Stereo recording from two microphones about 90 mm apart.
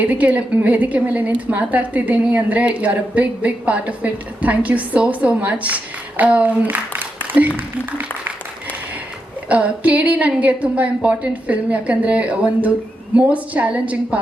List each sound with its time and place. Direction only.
0.0 s a woman's voice: 15° right (ahead or behind)
9.5 s a woman's voice: 15° right (ahead or behind)